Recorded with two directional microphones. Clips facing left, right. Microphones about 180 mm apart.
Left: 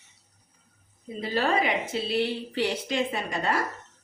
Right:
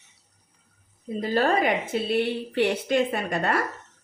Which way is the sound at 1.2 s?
50° right (ahead or behind).